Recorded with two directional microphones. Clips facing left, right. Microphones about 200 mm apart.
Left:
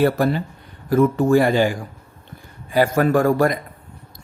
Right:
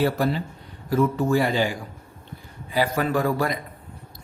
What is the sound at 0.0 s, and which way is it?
Speech, 55° left (ahead or behind).